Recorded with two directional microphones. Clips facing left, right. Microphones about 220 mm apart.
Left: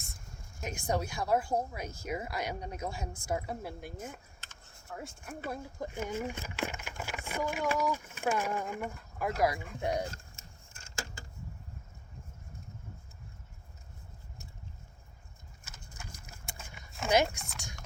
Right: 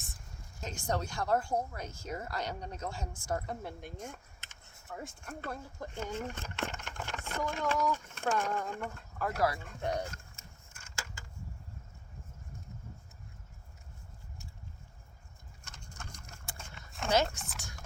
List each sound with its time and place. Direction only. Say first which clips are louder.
0.6 s speech: left 2 dB; 10° left (ahead or behind)
4.4 s a sound: left 2 dB; 20° right (ahead or behind)
4.9 s speech: even; centre (ahead or behind)
10.1 s vehicle: left 2 dB; 30° left (ahead or behind)
15.6 s a sound: even; 5° left (ahead or behind)
17.1 s speech: left 2 dB; 10° left (ahead or behind)